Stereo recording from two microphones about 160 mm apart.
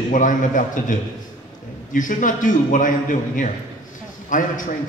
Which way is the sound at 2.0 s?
55° left (ahead or behind).